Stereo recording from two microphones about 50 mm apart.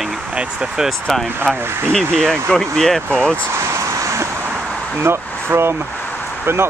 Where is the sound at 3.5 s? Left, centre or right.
Right.